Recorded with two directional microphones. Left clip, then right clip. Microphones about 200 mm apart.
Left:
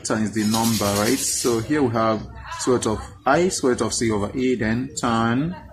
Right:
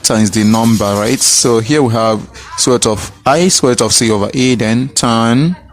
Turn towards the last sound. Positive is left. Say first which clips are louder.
# right 10 dB
turn(degrees=-35)  # may be behind; listen again after turning